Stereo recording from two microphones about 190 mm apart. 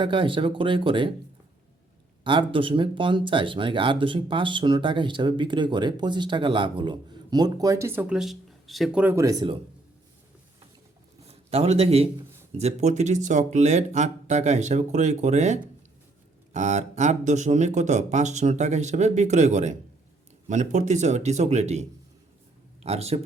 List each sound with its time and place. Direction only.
0.0 s speech: 25° right (ahead or behind)
2.2 s speech: 25° right (ahead or behind)
11.3 s a man's voice: 35° right (ahead or behind)